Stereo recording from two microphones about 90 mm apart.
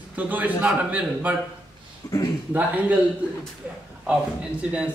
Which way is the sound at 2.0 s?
40° left (ahead or behind).